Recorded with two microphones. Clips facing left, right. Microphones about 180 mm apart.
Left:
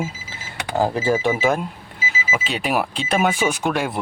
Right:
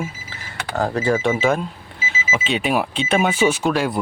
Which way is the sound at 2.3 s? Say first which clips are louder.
Right 2 dB; centre (ahead or behind).